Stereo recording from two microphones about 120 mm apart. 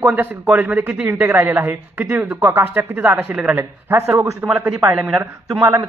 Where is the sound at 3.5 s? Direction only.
20° right (ahead or behind).